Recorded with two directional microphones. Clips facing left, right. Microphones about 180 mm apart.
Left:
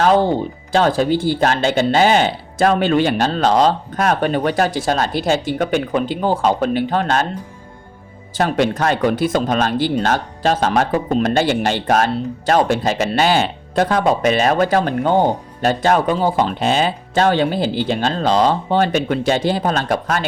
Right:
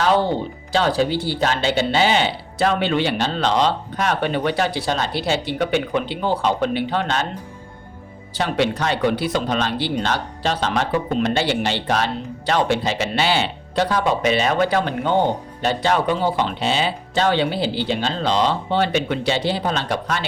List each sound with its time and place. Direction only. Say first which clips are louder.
0.0 s music: left 4 dB; 45° left (ahead or behind)
0.7 s speech: left 4 dB; 50° left (ahead or behind)
8.4 s speech: left 4 dB; 45° left (ahead or behind)